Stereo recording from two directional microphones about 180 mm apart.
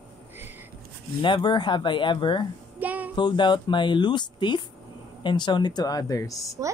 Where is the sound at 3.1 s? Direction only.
25° left (ahead or behind).